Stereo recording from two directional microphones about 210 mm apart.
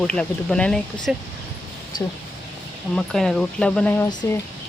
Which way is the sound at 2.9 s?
Centre (ahead or behind).